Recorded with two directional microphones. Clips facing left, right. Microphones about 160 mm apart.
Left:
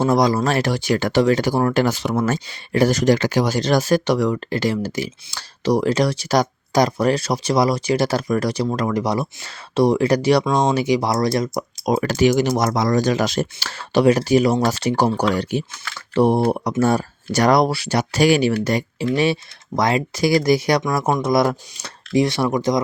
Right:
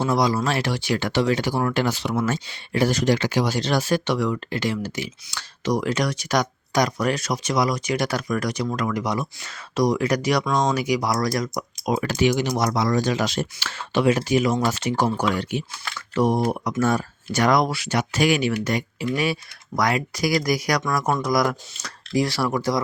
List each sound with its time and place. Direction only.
0.0 s speech: 45° left (ahead or behind); by 11.6 s 25° left (ahead or behind)
11.9 s speech: 40° left (ahead or behind); by 22.8 s 20° left (ahead or behind)